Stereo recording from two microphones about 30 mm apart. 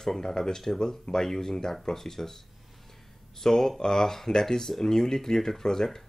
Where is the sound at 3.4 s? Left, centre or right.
Centre.